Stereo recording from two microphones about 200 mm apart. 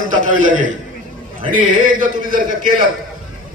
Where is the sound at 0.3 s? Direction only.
40° right (ahead or behind).